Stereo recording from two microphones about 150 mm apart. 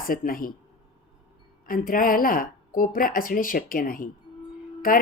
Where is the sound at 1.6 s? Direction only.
70° left (ahead or behind).